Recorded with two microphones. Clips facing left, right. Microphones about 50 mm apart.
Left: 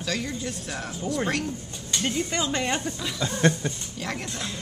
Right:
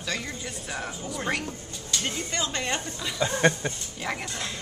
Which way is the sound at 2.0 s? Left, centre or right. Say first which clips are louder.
Left 5 dB; centre.